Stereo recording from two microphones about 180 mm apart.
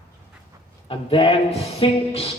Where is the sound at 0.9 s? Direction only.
30° left (ahead or behind).